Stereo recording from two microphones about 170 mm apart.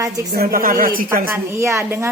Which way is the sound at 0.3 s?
55° right (ahead or behind).